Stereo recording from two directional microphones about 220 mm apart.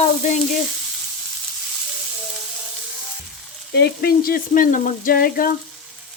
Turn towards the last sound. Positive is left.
turn(degrees=40)  # may be behind; listen again after turning